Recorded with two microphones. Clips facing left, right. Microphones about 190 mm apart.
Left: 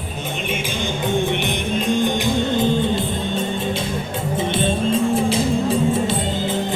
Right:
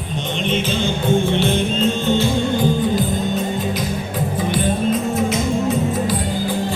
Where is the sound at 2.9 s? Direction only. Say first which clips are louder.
Right 3 dB; 30° left (ahead or behind).